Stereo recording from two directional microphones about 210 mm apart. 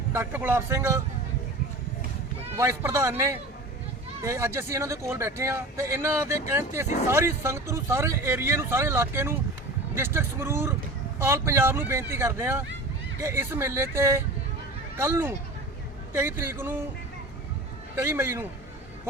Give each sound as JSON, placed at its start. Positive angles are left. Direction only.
{"t": 0.1, "sound": "speech", "side_deg": -10}
{"t": 2.6, "sound": "speech", "side_deg": -15}
{"t": 16.4, "sound": "speech", "side_deg": -10}
{"t": 17.9, "sound": "speech", "side_deg": -10}